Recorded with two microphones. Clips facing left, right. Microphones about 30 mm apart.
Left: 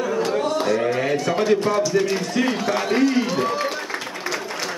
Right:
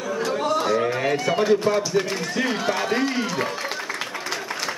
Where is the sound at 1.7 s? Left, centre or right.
Centre.